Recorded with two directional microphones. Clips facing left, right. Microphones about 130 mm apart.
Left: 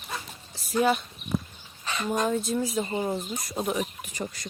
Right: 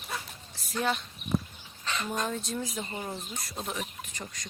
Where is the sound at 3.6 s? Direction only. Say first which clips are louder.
Left 8 dB; 10° left (ahead or behind).